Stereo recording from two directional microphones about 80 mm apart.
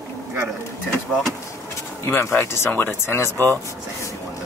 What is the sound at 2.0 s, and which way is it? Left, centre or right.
Speech, left.